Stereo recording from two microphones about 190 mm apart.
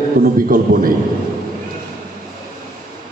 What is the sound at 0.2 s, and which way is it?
Speech, 45° right (ahead or behind).